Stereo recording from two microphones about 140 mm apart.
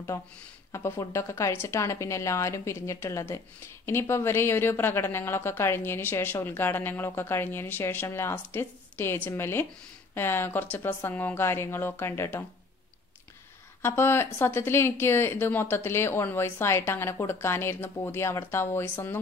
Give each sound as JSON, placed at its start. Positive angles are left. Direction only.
{"t": 0.7, "sound": "a woman's voice", "side_deg": 20}
{"t": 13.8, "sound": "a woman's voice", "side_deg": 15}